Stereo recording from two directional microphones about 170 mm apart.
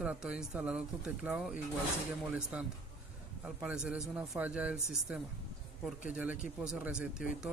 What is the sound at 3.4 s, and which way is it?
Speech, 5° right (ahead or behind).